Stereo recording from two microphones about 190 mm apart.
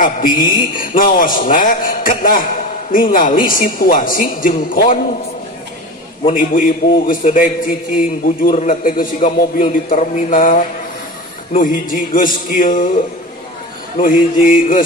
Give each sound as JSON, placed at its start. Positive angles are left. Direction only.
{"t": 0.0, "sound": "a man's voice", "side_deg": 45}
{"t": 6.3, "sound": "a man's voice", "side_deg": 45}
{"t": 13.9, "sound": "a man's voice", "side_deg": 45}